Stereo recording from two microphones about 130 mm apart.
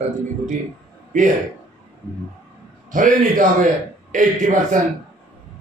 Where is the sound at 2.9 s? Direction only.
90° right.